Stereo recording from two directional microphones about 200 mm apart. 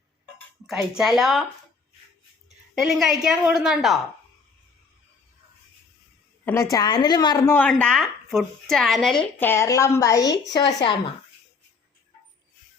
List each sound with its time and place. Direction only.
0.7 s speech: centre (ahead or behind)
2.7 s speech: centre (ahead or behind)
6.4 s a woman's voice: 15° left (ahead or behind)